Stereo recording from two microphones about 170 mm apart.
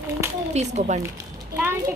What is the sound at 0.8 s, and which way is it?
Speech, 40° right (ahead or behind).